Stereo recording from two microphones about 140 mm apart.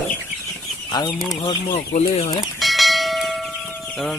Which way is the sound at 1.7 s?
50° left (ahead or behind).